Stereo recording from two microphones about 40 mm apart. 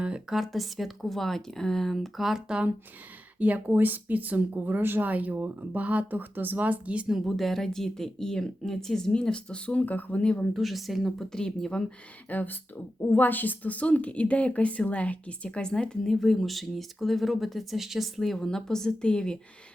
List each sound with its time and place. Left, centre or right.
0.3 s speech: centre
3.3 s speech: right
3.7 s speech: right
5.0 s speech: right
7.3 s a woman's voice: centre
9.1 s speech: left
9.8 s speech: left
10.2 s speech: left
10.5 s speech: centre
11.3 s a woman's voice: centre
12.3 s a woman's voice: left
16.0 s speech: centre
18.2 s a woman's voice: centre